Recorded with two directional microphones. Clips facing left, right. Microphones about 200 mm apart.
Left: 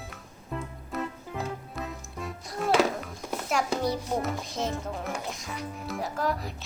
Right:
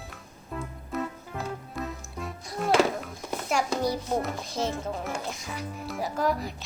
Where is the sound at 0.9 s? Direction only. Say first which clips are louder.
Right 1 dB; centre (ahead or behind).